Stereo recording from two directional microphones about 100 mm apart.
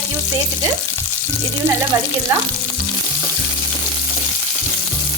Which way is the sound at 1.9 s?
25° right (ahead or behind).